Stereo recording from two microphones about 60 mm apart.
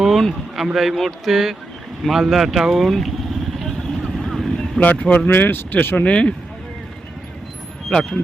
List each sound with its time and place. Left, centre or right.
0.0 s speech: centre
3.6 s vehicle: centre
4.8 s speech: left
6.1 s speech: centre
7.9 s speech: centre